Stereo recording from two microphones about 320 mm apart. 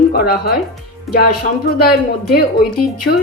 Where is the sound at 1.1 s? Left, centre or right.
Centre.